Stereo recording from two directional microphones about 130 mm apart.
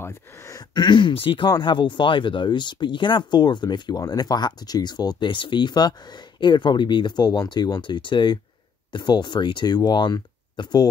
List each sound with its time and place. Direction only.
0.0 s speech: 20° left (ahead or behind)